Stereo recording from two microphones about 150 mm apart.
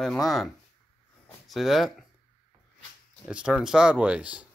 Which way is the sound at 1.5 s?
Centre (ahead or behind).